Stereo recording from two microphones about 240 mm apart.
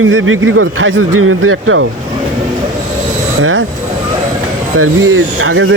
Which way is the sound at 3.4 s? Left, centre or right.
Right.